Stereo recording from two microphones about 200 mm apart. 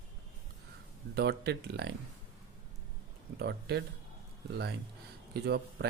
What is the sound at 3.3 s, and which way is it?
Speech, 55° right (ahead or behind).